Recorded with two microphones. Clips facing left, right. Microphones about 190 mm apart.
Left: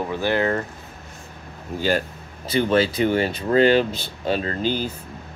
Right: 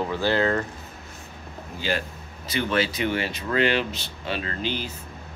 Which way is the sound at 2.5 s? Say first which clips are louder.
Left 6 dB; 35° left (ahead or behind).